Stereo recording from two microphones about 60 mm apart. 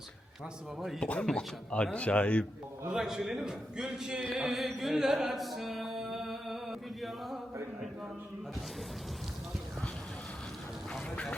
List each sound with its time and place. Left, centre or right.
0.9 s a man's voice: centre
2.9 s a man's voice: centre
4.4 s music: centre
11.1 s duck: left